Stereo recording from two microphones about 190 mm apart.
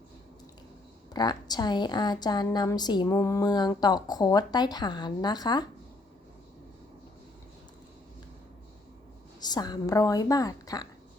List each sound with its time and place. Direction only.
1.1 s a woman's voice: 20° left (ahead or behind)
9.4 s a woman's voice: 20° left (ahead or behind)